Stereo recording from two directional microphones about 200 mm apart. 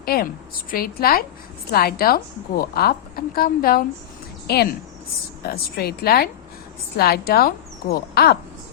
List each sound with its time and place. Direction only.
0.0 s a woman's voice: 50° left (ahead or behind)